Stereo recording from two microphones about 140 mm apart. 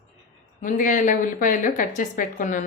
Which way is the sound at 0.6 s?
70° left (ahead or behind).